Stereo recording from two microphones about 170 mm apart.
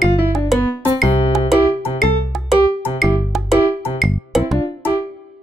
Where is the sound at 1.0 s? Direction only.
Centre (ahead or behind).